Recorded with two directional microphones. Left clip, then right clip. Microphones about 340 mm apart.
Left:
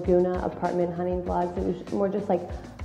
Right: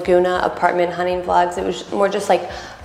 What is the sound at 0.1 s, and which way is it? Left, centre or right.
A woman's voice, centre.